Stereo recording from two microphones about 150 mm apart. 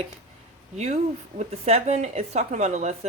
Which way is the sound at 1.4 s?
45° right (ahead or behind).